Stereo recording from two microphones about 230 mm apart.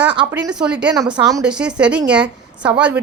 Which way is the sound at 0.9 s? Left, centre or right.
Centre.